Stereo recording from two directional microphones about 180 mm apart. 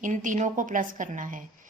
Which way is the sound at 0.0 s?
45° right (ahead or behind).